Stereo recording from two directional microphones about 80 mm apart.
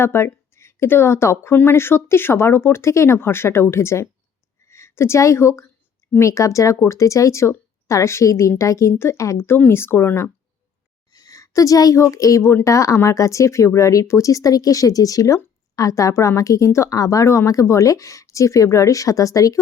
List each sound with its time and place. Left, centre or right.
0.0 s a woman's voice: left
9.4 s speech: left
11.1 s a woman's voice: left